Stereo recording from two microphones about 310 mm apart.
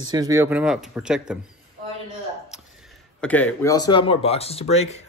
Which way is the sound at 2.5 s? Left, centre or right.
Centre.